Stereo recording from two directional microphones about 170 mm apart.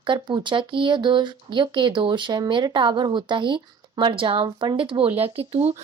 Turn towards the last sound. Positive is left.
turn(degrees=-35)  # may be behind; listen again after turning